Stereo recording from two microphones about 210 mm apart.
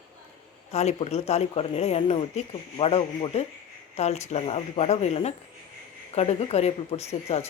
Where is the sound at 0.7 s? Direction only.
30° left (ahead or behind).